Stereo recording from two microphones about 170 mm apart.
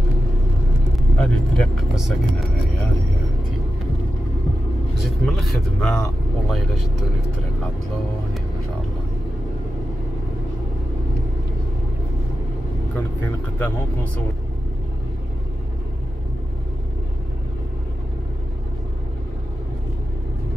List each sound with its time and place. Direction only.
1.1 s speech: 5° left (ahead or behind)
5.0 s speech: centre (ahead or behind)
12.9 s speech: 10° left (ahead or behind)